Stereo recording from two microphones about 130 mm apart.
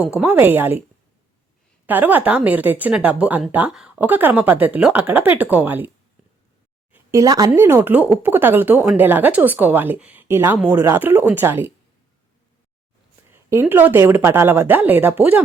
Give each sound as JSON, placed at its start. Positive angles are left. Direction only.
{"t": 0.0, "sound": "speech", "side_deg": -10}
{"t": 1.9, "sound": "speech", "side_deg": -15}
{"t": 6.9, "sound": "speech", "side_deg": -25}
{"t": 13.3, "sound": "speech", "side_deg": -15}